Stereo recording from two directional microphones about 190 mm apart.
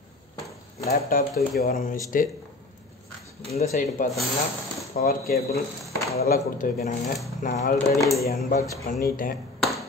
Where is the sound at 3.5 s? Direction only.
35° left (ahead or behind).